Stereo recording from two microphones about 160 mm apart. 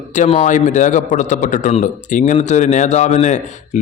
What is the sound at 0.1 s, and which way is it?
A man's voice, 50° left (ahead or behind).